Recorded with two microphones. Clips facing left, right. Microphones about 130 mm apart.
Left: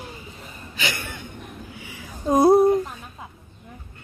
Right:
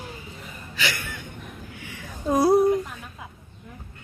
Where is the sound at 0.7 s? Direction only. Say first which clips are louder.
Even; 20° left (ahead or behind).